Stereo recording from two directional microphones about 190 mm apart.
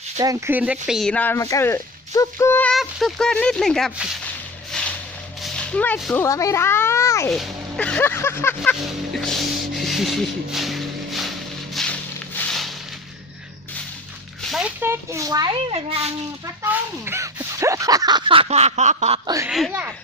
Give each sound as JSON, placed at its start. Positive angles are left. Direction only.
{"t": 0.2, "sound": "speech", "side_deg": -15}
{"t": 4.7, "sound": "a sound", "side_deg": 5}
{"t": 5.4, "sound": "a child's voice", "side_deg": 5}
{"t": 7.3, "sound": "speech", "side_deg": 5}
{"t": 9.8, "sound": "a sound", "side_deg": 0}
{"t": 11.7, "sound": "music", "side_deg": 0}
{"t": 12.4, "sound": "a sound", "side_deg": 0}
{"t": 14.5, "sound": "speech", "side_deg": -10}
{"t": 15.7, "sound": "speech", "side_deg": -30}
{"t": 16.6, "sound": "speech", "side_deg": -15}
{"t": 19.5, "sound": "speech", "side_deg": 0}